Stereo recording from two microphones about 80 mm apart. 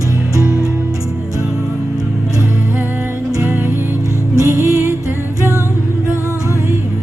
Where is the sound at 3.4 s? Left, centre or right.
Right.